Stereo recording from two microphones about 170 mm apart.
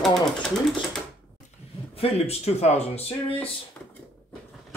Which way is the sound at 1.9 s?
35° left (ahead or behind).